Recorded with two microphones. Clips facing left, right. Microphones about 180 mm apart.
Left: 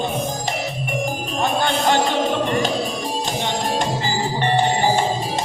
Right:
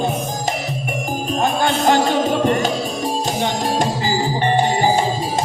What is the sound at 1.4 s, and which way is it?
Music, 45° right (ahead or behind).